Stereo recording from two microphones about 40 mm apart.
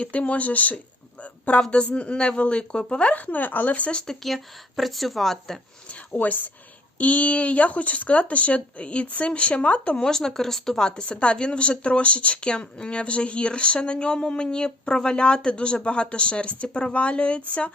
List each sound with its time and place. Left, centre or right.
0.0 s speech: left
1.2 s a sound: left
1.7 s speech: left
4.0 s speech: centre
6.1 s speech: left
10.0 s speech: centre
10.8 s speech: left